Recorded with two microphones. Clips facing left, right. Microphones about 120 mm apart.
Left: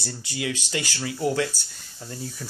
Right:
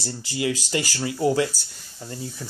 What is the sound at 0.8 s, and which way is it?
Speech, 40° right (ahead or behind).